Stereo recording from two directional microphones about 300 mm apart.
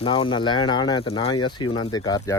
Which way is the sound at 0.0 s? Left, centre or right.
Centre.